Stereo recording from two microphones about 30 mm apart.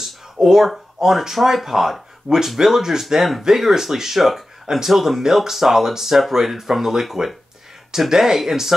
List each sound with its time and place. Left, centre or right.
0.0 s a sound: centre
1.0 s speech: centre
4.9 s speech: centre